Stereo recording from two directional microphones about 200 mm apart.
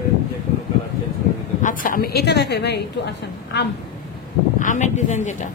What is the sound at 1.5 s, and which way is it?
A woman's voice, 40° left (ahead or behind).